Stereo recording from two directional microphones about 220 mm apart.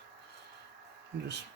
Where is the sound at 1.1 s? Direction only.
50° right (ahead or behind).